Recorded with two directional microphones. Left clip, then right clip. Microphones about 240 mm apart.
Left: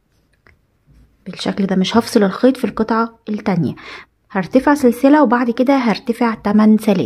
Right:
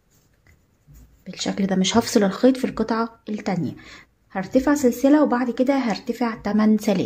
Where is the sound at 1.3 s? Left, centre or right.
Left.